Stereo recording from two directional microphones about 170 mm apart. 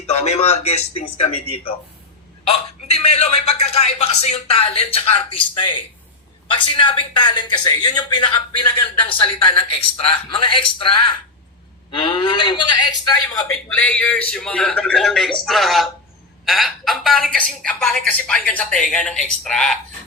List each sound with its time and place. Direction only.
0.1 s a man's voice: 35° left (ahead or behind)
13.7 s a woman's voice: 10° left (ahead or behind)